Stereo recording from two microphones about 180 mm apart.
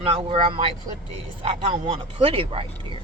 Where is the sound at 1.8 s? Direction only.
30° right (ahead or behind).